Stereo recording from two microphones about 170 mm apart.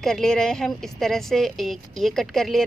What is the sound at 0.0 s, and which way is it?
A woman's voice, centre (ahead or behind).